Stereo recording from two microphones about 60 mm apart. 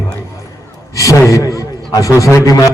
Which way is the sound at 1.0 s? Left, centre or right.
Left.